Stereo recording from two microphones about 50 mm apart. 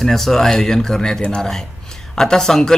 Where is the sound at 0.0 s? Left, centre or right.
Centre.